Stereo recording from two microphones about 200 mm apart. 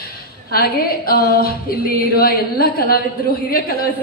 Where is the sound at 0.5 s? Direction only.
50° left (ahead or behind).